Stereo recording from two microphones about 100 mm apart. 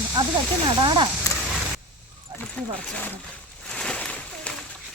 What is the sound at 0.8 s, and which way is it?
Speech, 50° right (ahead or behind).